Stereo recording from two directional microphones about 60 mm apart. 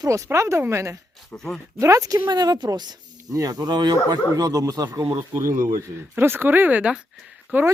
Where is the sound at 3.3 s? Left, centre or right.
Right.